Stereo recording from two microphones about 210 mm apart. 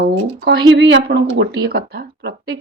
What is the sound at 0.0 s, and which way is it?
Speech, 50° right (ahead or behind).